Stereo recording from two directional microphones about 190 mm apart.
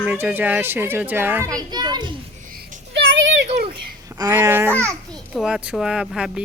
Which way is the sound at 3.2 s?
70° right (ahead or behind).